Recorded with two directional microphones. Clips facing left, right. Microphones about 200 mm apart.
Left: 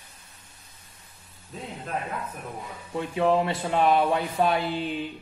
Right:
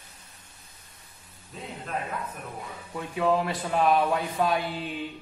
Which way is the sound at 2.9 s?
25° left (ahead or behind).